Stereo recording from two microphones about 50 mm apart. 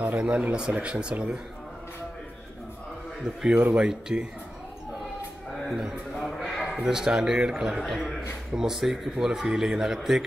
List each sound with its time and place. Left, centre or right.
0.0 s speech: right
3.3 s a man's voice: centre
6.1 s a sound: centre
7.1 s a man's voice: centre